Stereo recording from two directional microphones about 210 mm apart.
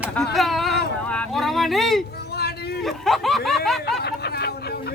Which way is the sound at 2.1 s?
50° left (ahead or behind).